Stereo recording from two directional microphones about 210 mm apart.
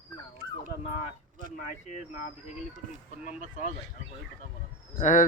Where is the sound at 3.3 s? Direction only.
35° left (ahead or behind).